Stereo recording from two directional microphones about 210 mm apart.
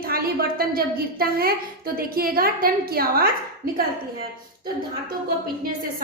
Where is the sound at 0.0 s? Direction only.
45° right (ahead or behind).